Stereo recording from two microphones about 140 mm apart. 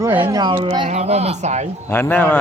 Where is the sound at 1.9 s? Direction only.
15° left (ahead or behind).